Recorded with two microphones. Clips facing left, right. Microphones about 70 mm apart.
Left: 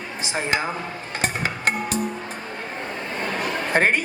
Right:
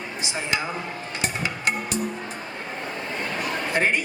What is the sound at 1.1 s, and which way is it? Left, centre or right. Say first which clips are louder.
Music: left 3 dB; left.